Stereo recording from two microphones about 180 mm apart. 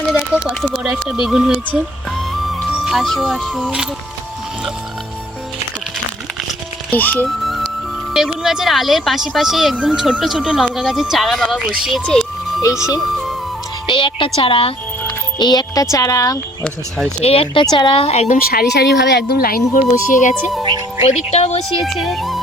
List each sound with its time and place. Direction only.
0.1 s a sound: centre (ahead or behind)
1.0 s speech: 5° right (ahead or behind)
6.9 s speech: 10° left (ahead or behind)
12.6 s speech: 20° left (ahead or behind)
17.2 s speech: 35° left (ahead or behind)
18.3 s speech: 55° left (ahead or behind); by 21.6 s 35° left (ahead or behind)
21.8 s speech: centre (ahead or behind)